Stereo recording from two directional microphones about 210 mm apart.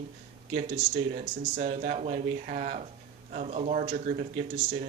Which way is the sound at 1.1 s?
40° right (ahead or behind).